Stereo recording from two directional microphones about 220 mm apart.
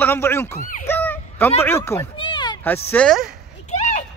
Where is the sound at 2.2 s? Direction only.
20° left (ahead or behind).